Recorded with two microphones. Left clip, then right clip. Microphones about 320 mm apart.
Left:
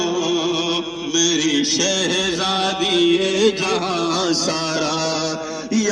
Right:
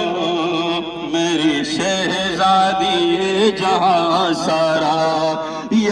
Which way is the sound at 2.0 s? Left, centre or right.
Centre.